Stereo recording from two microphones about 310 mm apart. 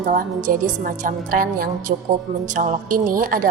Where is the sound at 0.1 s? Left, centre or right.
Right.